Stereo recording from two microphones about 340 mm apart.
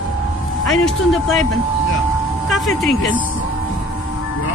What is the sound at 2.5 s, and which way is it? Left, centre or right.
Speech, centre.